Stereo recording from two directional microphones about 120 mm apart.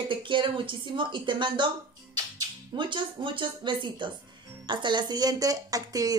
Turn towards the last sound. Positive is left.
turn(degrees=-30)  # may be behind; listen again after turning